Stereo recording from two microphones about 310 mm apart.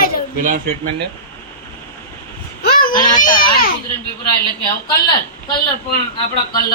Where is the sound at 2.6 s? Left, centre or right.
Left.